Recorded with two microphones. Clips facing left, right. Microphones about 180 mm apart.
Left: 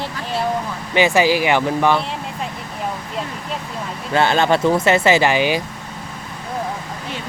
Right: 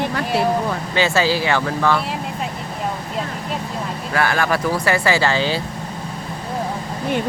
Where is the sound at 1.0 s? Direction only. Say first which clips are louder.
Left 4 dB; 15° left (ahead or behind).